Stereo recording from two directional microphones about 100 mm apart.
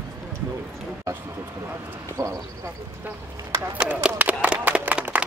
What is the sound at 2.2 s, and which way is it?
Speech, 35° right (ahead or behind).